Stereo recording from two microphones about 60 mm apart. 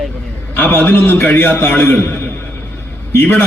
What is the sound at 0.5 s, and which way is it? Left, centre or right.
A man's voice, left.